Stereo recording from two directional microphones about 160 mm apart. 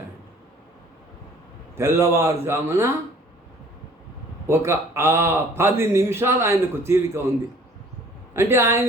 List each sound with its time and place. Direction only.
1.7 s speech: 15° right (ahead or behind)
4.4 s speech: 15° right (ahead or behind)
8.3 s speech: 15° right (ahead or behind)